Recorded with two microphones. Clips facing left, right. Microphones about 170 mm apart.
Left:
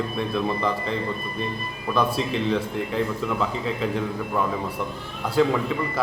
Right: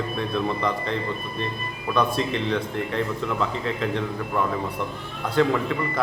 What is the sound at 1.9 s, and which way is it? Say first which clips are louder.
Speech: even; 5° left (ahead or behind).